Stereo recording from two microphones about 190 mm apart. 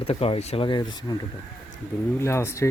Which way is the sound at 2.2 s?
15° left (ahead or behind).